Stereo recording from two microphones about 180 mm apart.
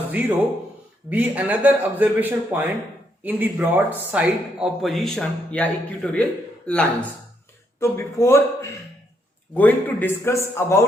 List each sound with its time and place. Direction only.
0.1 s a man's voice: 10° right (ahead or behind); by 8.4 s 15° left (ahead or behind)
9.6 s a man's voice: 10° left (ahead or behind)